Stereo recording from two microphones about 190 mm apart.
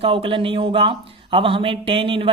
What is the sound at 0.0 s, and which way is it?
Speech, 30° right (ahead or behind).